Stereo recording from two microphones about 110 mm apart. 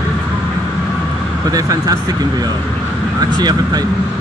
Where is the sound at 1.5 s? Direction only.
35° right (ahead or behind).